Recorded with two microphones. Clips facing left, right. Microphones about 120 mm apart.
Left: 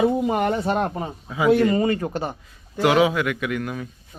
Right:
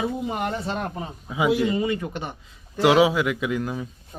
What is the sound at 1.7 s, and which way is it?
Speech, 45° left (ahead or behind).